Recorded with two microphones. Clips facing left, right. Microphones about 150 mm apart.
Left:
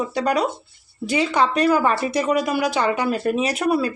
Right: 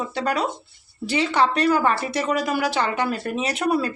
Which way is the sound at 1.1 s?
10° left (ahead or behind).